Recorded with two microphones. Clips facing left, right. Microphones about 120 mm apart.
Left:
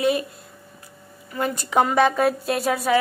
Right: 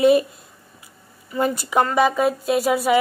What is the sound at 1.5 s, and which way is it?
Speech, 5° right (ahead or behind).